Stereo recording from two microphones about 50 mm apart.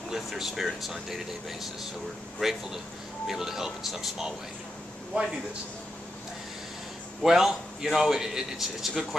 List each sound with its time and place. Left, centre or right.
0.1 s a man's voice: centre
5.1 s a man's voice: right
7.2 s a man's voice: centre